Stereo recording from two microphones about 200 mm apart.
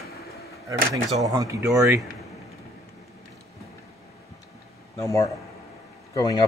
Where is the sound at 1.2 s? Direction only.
15° right (ahead or behind).